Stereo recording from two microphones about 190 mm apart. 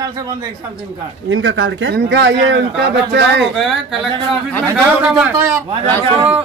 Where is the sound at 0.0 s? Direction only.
20° right (ahead or behind).